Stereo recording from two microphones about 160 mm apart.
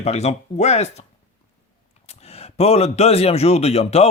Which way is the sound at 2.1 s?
40° left (ahead or behind).